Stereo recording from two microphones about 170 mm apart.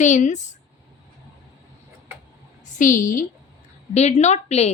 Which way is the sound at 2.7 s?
50° left (ahead or behind).